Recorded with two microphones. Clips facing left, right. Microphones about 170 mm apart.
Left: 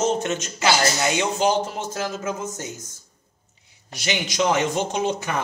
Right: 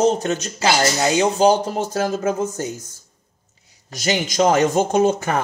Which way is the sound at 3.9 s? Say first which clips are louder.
Right 5 dB; 40° right (ahead or behind).